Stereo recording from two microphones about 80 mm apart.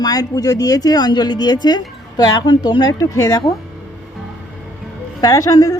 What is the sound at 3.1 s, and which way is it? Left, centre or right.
Speech, left.